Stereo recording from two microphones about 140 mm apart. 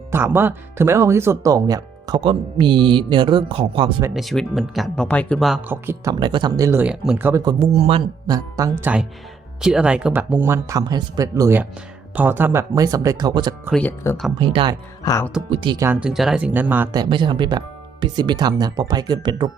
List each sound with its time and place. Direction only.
0.1 s speech: 15° right (ahead or behind); by 3.9 s 40° right (ahead or behind)
4.1 s speech: centre (ahead or behind)
5.6 s speech: 15° right (ahead or behind)
6.1 s speech: 35° right (ahead or behind)
6.8 s speech: 5° right (ahead or behind)
7.6 s speech: 45° right (ahead or behind)
8.3 s speech: 25° right (ahead or behind)
13.7 s speech: 10° left (ahead or behind)
14.3 s speech: 35° right (ahead or behind)
15.0 s speech: 25° left (ahead or behind)
15.4 s speech: 40° right (ahead or behind)
15.8 s speech: 15° right (ahead or behind)
16.0 s speech: 5° right (ahead or behind)
16.9 s speech: 30° right (ahead or behind)